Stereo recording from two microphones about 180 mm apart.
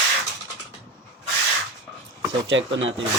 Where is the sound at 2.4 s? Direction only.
90° right.